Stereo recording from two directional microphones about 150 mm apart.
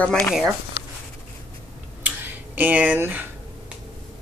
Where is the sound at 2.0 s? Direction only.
10° right (ahead or behind).